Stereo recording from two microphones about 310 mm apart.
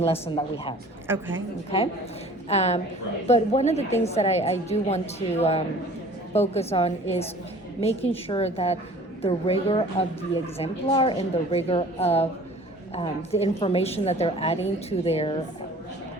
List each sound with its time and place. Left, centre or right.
0.0 s a woman's voice: centre
1.0 s a woman's voice: centre
2.5 s a woman's voice: left